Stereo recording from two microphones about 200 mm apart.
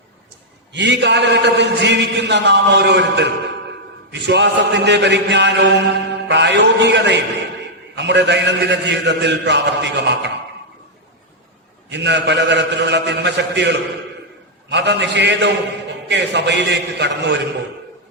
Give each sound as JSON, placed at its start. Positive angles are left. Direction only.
{"t": 0.7, "sound": "chant", "side_deg": -60}
{"t": 11.9, "sound": "chant", "side_deg": -60}